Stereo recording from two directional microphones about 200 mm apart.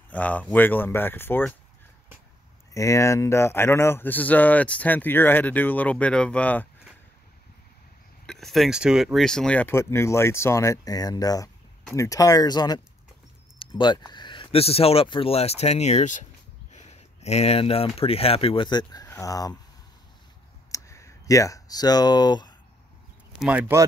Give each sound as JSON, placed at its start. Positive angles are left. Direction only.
{"t": 0.1, "sound": "speech", "side_deg": 5}
{"t": 2.7, "sound": "speech", "side_deg": 15}
{"t": 8.3, "sound": "speech", "side_deg": 0}
{"t": 20.7, "sound": "speech", "side_deg": 15}
{"t": 23.4, "sound": "speech", "side_deg": -10}